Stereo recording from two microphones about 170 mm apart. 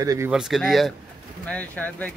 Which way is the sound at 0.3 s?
Centre (ahead or behind).